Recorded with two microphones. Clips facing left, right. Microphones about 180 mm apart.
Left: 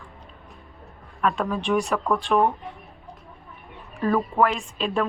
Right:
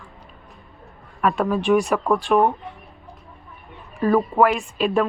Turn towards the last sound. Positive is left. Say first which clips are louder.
# right 5 dB
turn(degrees=-5)  # may be behind; listen again after turning